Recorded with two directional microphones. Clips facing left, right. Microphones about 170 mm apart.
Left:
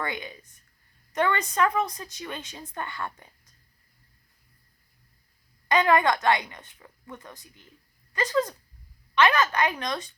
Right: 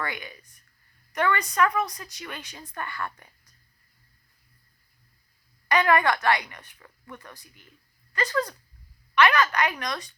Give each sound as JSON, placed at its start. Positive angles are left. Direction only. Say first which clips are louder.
{"t": 0.0, "sound": "speech", "louder": "left 1 dB", "side_deg": 20}
{"t": 5.6, "sound": "speech", "louder": "left 1 dB", "side_deg": 20}